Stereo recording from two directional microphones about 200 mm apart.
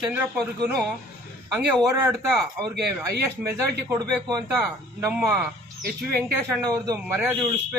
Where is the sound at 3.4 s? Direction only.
15° right (ahead or behind).